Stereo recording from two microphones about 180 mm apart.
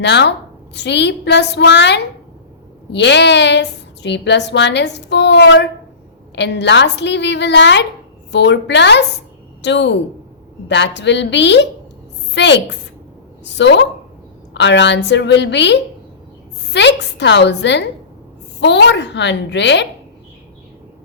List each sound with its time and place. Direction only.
0.0 s a woman's voice: 75° left (ahead or behind)